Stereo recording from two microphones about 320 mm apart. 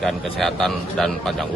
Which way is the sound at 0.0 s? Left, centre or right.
Centre.